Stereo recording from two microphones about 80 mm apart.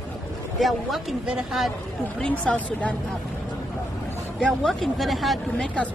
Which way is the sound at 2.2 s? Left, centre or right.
Centre.